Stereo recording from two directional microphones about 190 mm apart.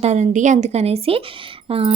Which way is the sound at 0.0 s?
35° right (ahead or behind).